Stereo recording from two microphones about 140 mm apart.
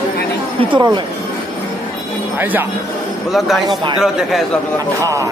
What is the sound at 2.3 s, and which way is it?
Speech, 15° right (ahead or behind).